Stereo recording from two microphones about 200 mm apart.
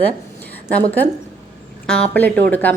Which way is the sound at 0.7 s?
10° left (ahead or behind).